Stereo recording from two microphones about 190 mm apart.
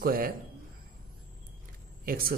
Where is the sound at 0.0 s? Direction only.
50° right (ahead or behind).